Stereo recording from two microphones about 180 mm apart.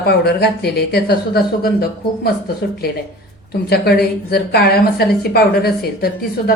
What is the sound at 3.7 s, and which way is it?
A woman's voice, 60° left (ahead or behind).